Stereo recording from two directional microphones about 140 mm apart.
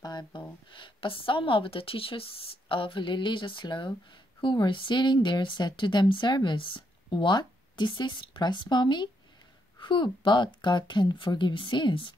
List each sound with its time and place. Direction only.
0.0 s speech: 30° left (ahead or behind)